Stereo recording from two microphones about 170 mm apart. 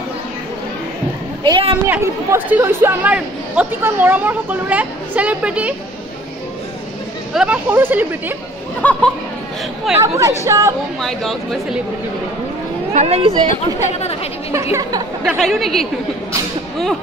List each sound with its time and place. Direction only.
1.4 s a woman's voice: 30° right (ahead or behind)
1.9 s speech: 10° right (ahead or behind)
7.3 s speech: 10° right (ahead or behind)
8.8 s speech: 10° left (ahead or behind)
9.9 s speech: 20° right (ahead or behind)
11.0 s speech: centre (ahead or behind)
12.9 s speech: 40° right (ahead or behind)
13.8 s speech: 40° left (ahead or behind)
14.5 s a woman's voice: 15° right (ahead or behind)
15.2 s speech: centre (ahead or behind)